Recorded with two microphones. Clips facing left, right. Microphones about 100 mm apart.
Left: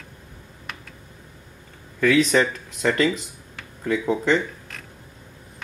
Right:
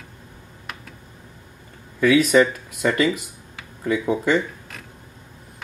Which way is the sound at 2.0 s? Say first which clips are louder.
Right 3 dB; 10° right (ahead or behind).